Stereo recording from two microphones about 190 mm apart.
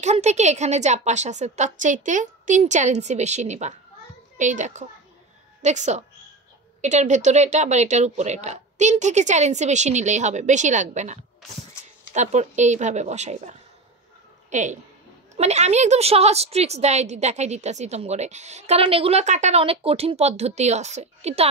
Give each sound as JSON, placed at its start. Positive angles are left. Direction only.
{"t": 0.0, "sound": "a woman's voice", "side_deg": -35}